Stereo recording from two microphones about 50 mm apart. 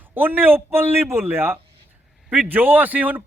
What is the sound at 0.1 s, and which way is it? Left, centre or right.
A man's voice, right.